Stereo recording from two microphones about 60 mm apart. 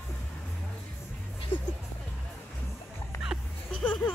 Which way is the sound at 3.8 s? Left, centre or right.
Left.